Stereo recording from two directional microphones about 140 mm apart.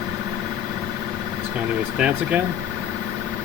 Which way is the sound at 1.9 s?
5° right (ahead or behind).